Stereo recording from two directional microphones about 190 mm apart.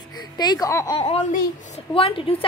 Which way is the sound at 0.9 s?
30° left (ahead or behind).